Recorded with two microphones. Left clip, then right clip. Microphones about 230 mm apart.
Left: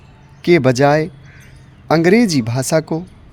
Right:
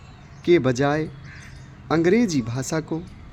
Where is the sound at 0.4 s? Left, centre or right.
Left.